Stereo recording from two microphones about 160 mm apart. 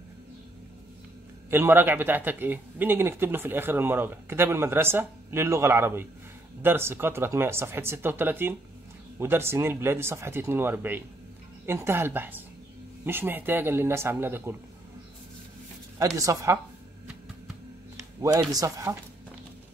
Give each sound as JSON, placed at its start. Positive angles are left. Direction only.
{"t": 1.5, "sound": "a man's voice", "side_deg": -15}
{"t": 16.2, "sound": "speech", "side_deg": -20}
{"t": 17.9, "sound": "speech", "side_deg": -20}